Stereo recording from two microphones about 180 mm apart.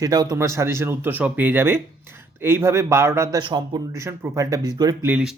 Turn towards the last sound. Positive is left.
turn(degrees=-5)  # may be behind; listen again after turning